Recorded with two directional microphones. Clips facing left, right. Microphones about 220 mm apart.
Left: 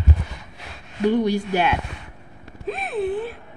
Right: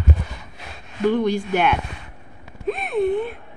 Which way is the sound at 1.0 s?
15° left (ahead or behind).